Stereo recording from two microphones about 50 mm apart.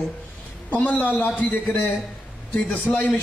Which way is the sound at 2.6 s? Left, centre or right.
Left.